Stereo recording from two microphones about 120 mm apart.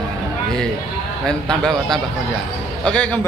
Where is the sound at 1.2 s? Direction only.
5° left (ahead or behind).